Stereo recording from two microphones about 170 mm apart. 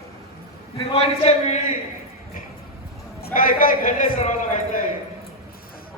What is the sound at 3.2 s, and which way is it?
A man's voice, 55° left (ahead or behind).